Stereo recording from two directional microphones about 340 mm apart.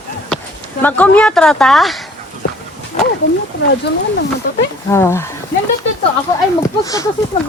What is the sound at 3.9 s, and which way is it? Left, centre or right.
Speech, left.